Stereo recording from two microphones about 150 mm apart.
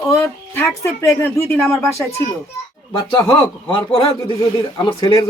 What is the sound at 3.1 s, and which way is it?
A man's voice, 30° left (ahead or behind).